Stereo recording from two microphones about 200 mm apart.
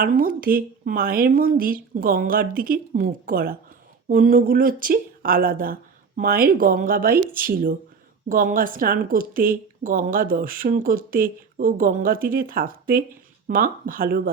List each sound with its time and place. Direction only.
0.0 s a woman's voice: 45° right (ahead or behind)